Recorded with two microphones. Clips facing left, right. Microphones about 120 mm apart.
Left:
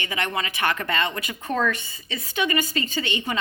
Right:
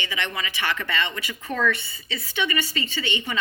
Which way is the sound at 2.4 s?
40° left (ahead or behind).